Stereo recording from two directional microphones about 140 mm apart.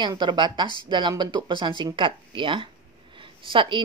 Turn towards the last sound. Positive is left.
turn(degrees=-35)  # may be behind; listen again after turning